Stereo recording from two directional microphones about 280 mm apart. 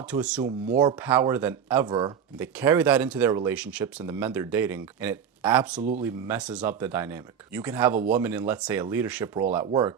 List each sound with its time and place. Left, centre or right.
0.1 s speech: centre
0.7 s speech: centre